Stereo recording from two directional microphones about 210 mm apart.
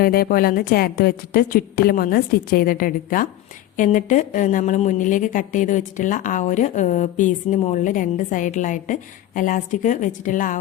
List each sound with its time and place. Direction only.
0.0 s a woman's voice: 45° left (ahead or behind)